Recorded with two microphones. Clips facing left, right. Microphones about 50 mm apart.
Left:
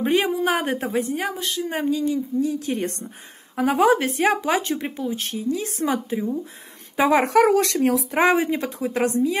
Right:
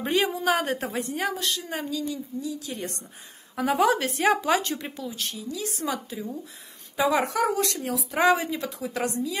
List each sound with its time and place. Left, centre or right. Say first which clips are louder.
0.0 s a woman's voice: left 4 dB; centre
1.7 s speech: left 7 dB; left
2.4 s a woman's voice: left 8 dB; left
3.5 s a woman's voice: left 4 dB; centre
4.6 s a woman's voice: left 5 dB; left
7.0 s a woman's voice: left 5 dB; left
7.3 s speech: left 8 dB; left
8.1 s a woman's voice: right 1 dB; left